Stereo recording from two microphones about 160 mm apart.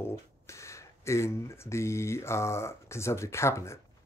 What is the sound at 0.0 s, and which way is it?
Speech, 15° left (ahead or behind).